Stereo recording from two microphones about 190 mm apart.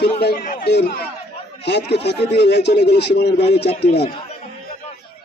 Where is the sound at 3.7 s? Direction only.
35° left (ahead or behind).